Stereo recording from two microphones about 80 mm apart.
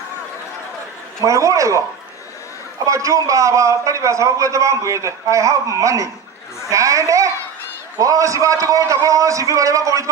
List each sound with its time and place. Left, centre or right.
1.2 s a man's voice: right
2.8 s a man's voice: right